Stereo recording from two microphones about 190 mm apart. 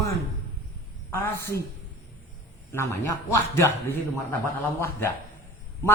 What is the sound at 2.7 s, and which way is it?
Speech, 15° left (ahead or behind).